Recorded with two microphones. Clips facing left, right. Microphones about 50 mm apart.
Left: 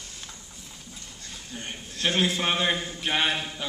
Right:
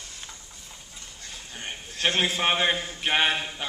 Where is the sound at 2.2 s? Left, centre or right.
Right.